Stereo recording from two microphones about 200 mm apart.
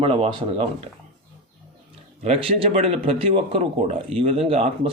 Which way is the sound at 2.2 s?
30° right (ahead or behind).